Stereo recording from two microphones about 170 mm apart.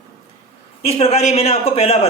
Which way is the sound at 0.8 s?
40° left (ahead or behind).